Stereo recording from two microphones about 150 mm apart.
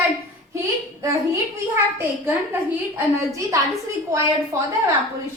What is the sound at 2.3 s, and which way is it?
A woman's voice, 15° right (ahead or behind).